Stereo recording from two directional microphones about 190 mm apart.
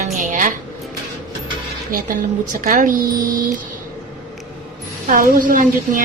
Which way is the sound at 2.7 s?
45° right (ahead or behind).